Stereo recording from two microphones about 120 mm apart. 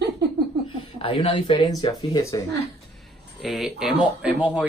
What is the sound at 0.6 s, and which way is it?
Speech, 50° left (ahead or behind).